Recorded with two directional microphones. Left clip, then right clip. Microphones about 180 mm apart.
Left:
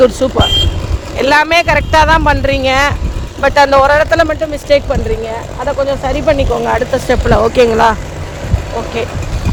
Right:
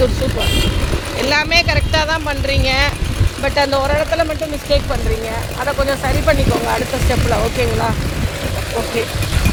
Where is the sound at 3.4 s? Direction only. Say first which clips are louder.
Left 8 dB; 55° left (ahead or behind).